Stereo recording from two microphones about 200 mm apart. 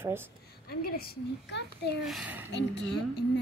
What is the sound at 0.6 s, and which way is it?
A woman's voice, 50° left (ahead or behind).